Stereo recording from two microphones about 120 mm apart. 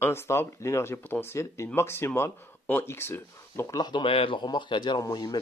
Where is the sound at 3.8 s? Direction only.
40° left (ahead or behind).